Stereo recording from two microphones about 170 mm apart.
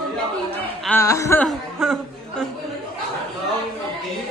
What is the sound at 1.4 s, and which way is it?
Speech, 5° left (ahead or behind).